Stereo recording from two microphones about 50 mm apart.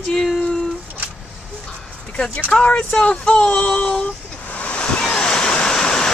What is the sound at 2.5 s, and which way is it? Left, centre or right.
Speech, left.